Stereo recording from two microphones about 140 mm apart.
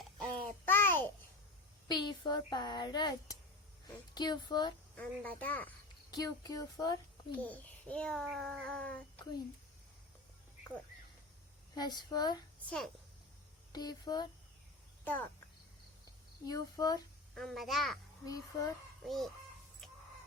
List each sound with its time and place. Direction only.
0.0 s babbling: 10° left (ahead or behind)
1.9 s a woman's voice: 30° left (ahead or behind)
4.9 s a child's voice: 10° left (ahead or behind)
6.1 s speech: 25° left (ahead or behind)
7.3 s a child's voice: 10° left (ahead or behind)
11.7 s speech: 30° left (ahead or behind)
12.6 s a child's voice: 5° left (ahead or behind)
13.7 s speech: 30° left (ahead or behind)
15.0 s speech: 15° left (ahead or behind)
16.5 s speech: 25° left (ahead or behind)
17.3 s a child's voice: centre (ahead or behind)
19.0 s a child's voice: centre (ahead or behind)
19.8 s a sound: 5° left (ahead or behind)